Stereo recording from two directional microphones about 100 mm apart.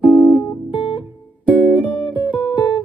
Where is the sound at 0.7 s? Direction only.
55° left (ahead or behind).